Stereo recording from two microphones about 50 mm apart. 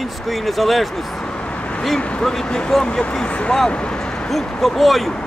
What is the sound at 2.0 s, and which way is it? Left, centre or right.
Speech, left.